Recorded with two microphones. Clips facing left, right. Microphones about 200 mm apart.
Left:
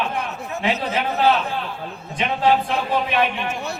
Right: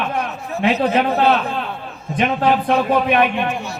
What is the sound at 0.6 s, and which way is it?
A man's voice, 60° right (ahead or behind).